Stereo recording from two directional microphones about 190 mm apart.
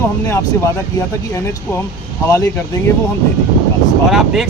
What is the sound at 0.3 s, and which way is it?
Speech, 15° left (ahead or behind).